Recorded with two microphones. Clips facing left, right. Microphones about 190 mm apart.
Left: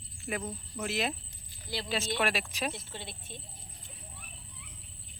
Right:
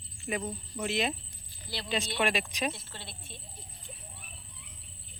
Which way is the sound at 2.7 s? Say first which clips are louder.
Left 3 dB; 15° left (ahead or behind).